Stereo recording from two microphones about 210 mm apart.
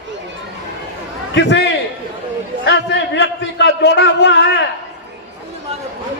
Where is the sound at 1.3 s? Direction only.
55° left (ahead or behind).